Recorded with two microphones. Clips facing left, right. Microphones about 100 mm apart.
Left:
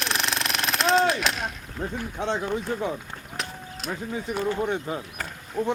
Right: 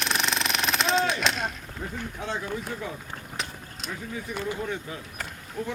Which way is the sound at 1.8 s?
25° left (ahead or behind).